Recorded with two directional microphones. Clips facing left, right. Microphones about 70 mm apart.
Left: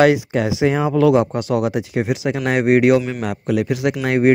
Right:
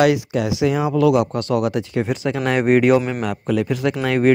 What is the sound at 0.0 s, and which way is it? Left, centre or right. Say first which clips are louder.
Speech: left 2 dB; left.